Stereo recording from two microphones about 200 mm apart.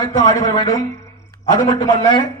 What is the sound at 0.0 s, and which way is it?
Speech, 20° left (ahead or behind).